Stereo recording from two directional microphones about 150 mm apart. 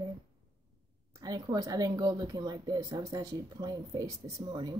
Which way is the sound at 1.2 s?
25° right (ahead or behind).